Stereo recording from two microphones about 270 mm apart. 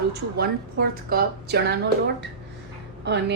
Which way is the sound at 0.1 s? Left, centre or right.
Right.